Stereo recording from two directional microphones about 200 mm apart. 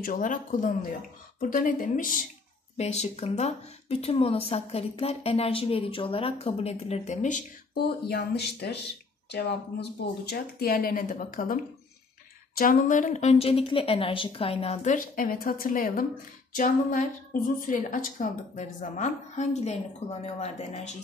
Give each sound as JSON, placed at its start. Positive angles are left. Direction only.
{"t": 0.0, "sound": "a woman's voice", "side_deg": 40}
{"t": 2.8, "sound": "a woman's voice", "side_deg": 35}